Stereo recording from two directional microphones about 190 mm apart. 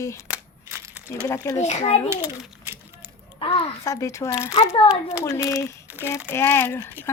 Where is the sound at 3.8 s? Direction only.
15° left (ahead or behind).